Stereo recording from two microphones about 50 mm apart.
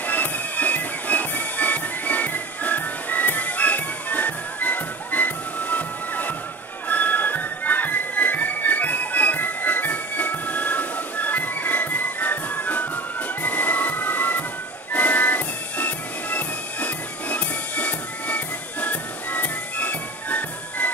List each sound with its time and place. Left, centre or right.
0.0 s music: left
6.9 s bagpipes: left
14.9 s music: left